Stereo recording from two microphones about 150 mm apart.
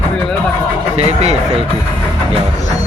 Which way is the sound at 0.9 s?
45° right (ahead or behind).